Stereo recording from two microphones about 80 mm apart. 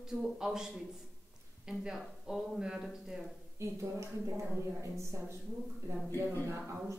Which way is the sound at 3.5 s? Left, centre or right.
Right.